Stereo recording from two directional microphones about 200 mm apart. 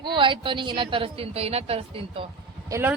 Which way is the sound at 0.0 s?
25° right (ahead or behind).